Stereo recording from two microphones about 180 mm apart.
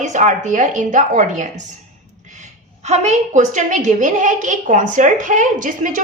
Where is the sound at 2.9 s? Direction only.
40° right (ahead or behind).